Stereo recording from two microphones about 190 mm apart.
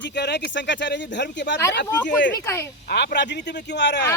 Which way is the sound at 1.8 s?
10° left (ahead or behind).